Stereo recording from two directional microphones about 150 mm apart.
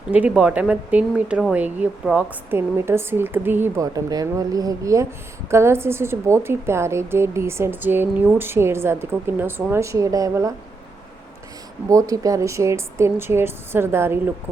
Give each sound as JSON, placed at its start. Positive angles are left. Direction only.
{"t": 0.1, "sound": "speech", "side_deg": -10}
{"t": 3.9, "sound": "speech", "side_deg": -25}
{"t": 11.9, "sound": "speech", "side_deg": -20}